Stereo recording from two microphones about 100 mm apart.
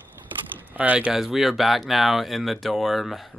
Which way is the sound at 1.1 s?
5° right (ahead or behind).